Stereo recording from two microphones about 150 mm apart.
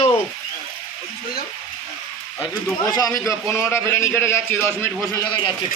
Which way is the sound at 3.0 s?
25° left (ahead or behind).